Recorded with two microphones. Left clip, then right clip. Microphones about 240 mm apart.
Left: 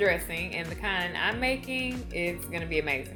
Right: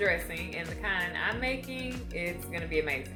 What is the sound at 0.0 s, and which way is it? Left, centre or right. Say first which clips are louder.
Speech: left 3 dB; left.